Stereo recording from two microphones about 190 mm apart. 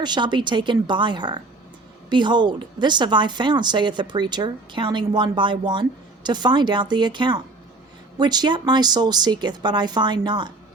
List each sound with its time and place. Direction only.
0.0 s a woman's voice: 25° right (ahead or behind)